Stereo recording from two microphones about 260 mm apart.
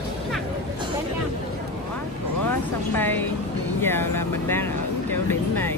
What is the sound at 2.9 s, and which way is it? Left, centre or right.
A woman's voice, centre.